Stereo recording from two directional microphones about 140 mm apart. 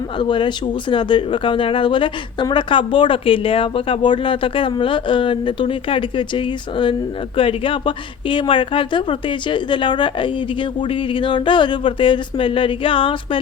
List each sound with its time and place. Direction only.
0.2 s speech: 35° left (ahead or behind)